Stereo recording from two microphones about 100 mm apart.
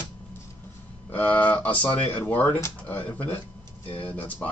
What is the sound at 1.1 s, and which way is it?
Speech, 15° left (ahead or behind).